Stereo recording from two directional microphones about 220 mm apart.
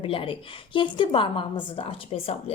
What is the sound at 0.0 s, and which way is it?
A woman's voice, 25° left (ahead or behind).